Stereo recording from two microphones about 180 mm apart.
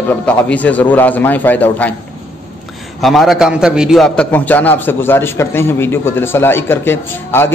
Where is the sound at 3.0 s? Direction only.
Centre (ahead or behind).